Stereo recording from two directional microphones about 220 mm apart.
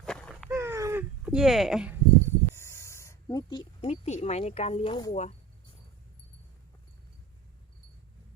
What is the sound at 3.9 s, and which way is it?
Speech, 30° left (ahead or behind).